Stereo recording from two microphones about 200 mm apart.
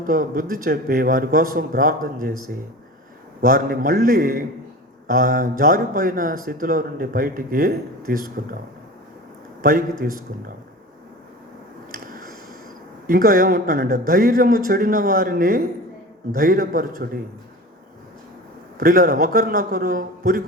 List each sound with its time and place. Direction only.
0.0 s speech: 45° right (ahead or behind)
3.4 s speech: 45° right (ahead or behind)
9.6 s a man's voice: 45° right (ahead or behind)
13.1 s speech: 45° right (ahead or behind)
17.0 s a man's voice: 55° right (ahead or behind)
18.8 s speech: 45° right (ahead or behind)